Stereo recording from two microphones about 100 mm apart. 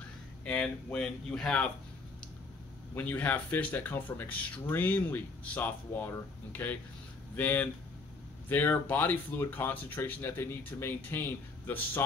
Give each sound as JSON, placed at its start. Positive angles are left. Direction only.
{"t": 0.5, "sound": "speech", "side_deg": 10}
{"t": 2.9, "sound": "speech", "side_deg": 15}